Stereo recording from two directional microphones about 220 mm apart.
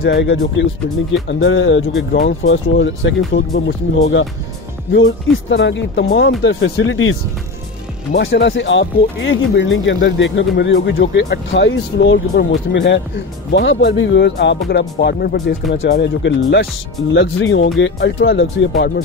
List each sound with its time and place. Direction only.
0.0 s speech: 50° left (ahead or behind)
1.4 s speech: 65° left (ahead or behind)
4.9 s speech: 55° left (ahead or behind)
8.2 s speech: 55° left (ahead or behind)